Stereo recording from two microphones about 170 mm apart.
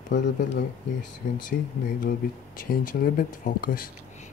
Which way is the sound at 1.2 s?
60° left (ahead or behind).